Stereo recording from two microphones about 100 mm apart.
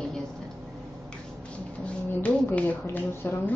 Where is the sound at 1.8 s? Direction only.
15° left (ahead or behind).